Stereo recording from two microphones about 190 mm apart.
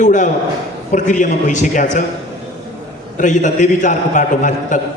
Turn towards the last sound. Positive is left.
turn(degrees=40)  # may be behind; listen again after turning